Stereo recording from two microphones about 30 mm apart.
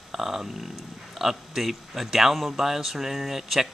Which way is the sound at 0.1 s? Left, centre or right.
Centre.